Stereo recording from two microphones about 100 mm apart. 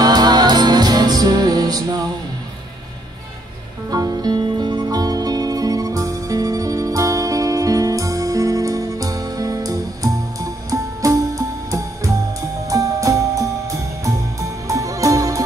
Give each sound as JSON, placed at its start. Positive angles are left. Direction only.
{"t": 0.0, "sound": "music", "side_deg": -45}
{"t": 3.9, "sound": "music", "side_deg": -40}
{"t": 14.7, "sound": "music", "side_deg": -35}